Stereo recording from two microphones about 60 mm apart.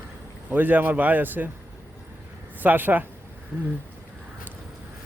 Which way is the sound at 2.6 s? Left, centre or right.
Right.